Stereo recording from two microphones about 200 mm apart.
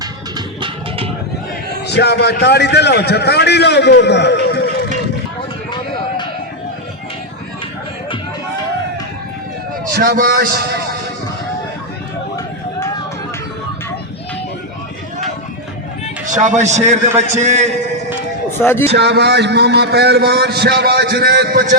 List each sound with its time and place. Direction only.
0.0 s music: 20° right (ahead or behind)
1.9 s a man's voice: 55° left (ahead or behind)
9.9 s a man's voice: 50° right (ahead or behind)
16.3 s a man's voice: 35° right (ahead or behind)
18.6 s a man's voice: 10° left (ahead or behind)
18.9 s a man's voice: 55° right (ahead or behind)